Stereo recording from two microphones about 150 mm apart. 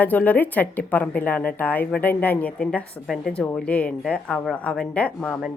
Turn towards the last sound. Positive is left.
turn(degrees=10)  # may be behind; listen again after turning